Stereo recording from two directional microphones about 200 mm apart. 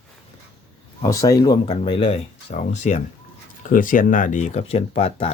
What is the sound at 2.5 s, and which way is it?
Speech, 35° left (ahead or behind).